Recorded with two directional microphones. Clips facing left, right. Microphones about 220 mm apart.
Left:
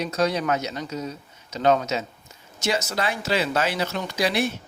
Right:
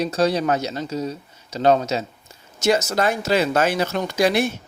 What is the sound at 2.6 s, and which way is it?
Speech, 45° right (ahead or behind).